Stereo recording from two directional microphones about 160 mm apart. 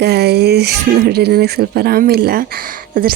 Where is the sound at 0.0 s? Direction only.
90° right.